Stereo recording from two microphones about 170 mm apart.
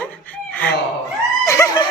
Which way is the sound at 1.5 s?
20° left (ahead or behind).